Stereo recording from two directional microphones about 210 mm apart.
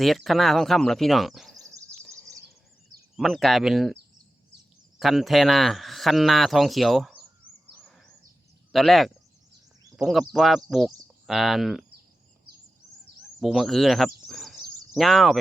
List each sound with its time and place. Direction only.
0.3 s speech: centre (ahead or behind)
1.5 s a sound: 15° right (ahead or behind)
3.2 s speech: centre (ahead or behind)
4.9 s speech: centre (ahead or behind)
8.7 s speech: centre (ahead or behind)
13.4 s speech: centre (ahead or behind)
14.3 s a sound: centre (ahead or behind)